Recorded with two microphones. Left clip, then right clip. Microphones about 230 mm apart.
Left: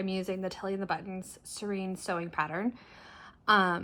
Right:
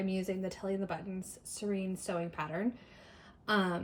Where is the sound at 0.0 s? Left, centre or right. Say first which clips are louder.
Left 3 dB; centre.